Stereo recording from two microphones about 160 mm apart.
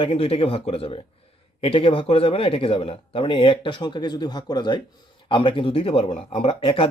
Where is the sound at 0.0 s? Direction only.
35° left (ahead or behind).